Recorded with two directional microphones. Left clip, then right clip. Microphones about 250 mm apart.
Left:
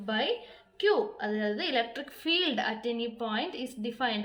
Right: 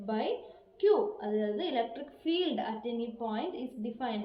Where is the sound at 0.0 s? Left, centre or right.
Left.